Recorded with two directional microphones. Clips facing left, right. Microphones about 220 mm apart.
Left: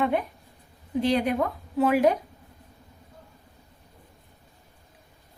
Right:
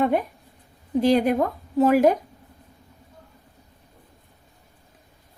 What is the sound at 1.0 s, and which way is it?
Speech, 45° right (ahead or behind).